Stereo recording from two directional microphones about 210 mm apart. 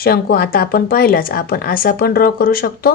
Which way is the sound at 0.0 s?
45° left (ahead or behind).